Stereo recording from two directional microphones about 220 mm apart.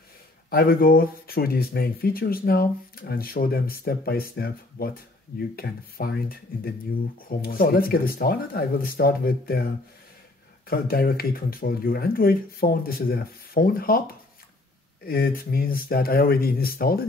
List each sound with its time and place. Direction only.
0.5 s speech: 45° left (ahead or behind)
10.7 s speech: 45° left (ahead or behind)
15.0 s speech: 45° left (ahead or behind)